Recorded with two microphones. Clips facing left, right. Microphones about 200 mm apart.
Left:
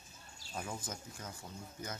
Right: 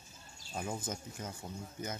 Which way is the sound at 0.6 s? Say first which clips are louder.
Right 4 dB; 25° right (ahead or behind).